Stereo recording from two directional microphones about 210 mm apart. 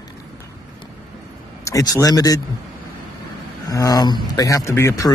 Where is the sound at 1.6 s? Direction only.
15° left (ahead or behind).